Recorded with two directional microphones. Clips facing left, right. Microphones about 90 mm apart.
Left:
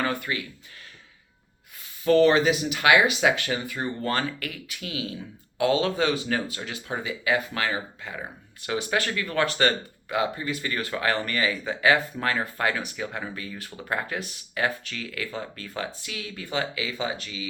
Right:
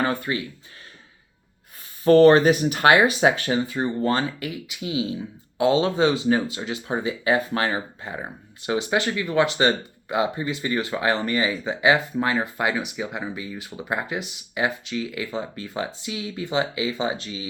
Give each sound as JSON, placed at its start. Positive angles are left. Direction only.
{"t": 0.0, "sound": "speech", "side_deg": -30}
{"t": 2.0, "sound": "speech", "side_deg": -45}